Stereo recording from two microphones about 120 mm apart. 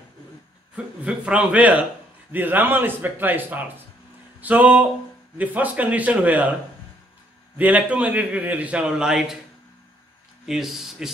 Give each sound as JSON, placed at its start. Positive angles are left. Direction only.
{"t": 1.0, "sound": "a man's voice", "side_deg": -10}
{"t": 4.4, "sound": "a sound", "side_deg": -15}
{"t": 5.4, "sound": "a man's voice", "side_deg": -15}
{"t": 7.5, "sound": "a man's voice", "side_deg": -10}
{"t": 10.4, "sound": "speech", "side_deg": -5}